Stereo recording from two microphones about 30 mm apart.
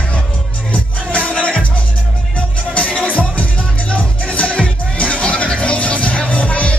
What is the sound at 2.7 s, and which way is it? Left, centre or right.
Music, left.